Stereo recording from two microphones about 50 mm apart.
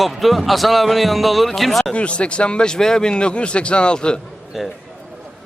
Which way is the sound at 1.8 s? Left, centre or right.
Left.